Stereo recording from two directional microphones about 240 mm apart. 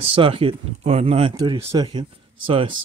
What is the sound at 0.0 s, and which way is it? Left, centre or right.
Speech, right.